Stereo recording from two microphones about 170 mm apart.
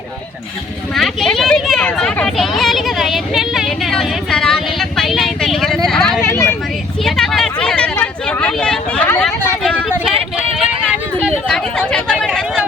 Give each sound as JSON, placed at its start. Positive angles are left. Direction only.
{"t": 0.9, "sound": "a sound", "side_deg": 0}
{"t": 6.2, "sound": "vehicle", "side_deg": 15}
{"t": 7.0, "sound": "vehicle", "side_deg": 5}
{"t": 11.2, "sound": "chatter", "side_deg": 5}